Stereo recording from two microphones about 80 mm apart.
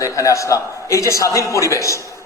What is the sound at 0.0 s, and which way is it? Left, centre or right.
A man's voice, left.